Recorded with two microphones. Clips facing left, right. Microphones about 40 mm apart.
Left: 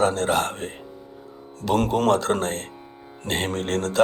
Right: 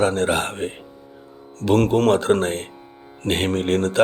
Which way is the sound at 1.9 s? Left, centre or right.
Centre.